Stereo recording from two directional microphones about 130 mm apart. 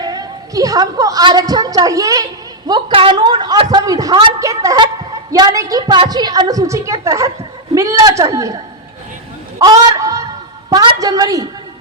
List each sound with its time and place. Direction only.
0.0 s a woman's voice: 30° right (ahead or behind)
2.6 s a woman's voice: 40° right (ahead or behind)
9.6 s honk: 25° right (ahead or behind)
10.7 s a woman's voice: 30° right (ahead or behind)